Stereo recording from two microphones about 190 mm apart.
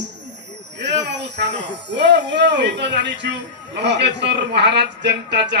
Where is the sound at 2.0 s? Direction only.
65° right (ahead or behind).